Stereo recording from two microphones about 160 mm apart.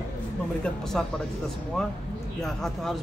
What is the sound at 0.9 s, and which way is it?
Speech, 5° left (ahead or behind).